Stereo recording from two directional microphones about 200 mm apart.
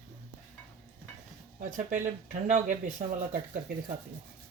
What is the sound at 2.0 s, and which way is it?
Speech, 35° right (ahead or behind).